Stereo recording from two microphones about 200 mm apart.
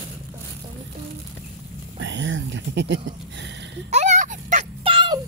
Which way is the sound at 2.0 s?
65° right (ahead or behind).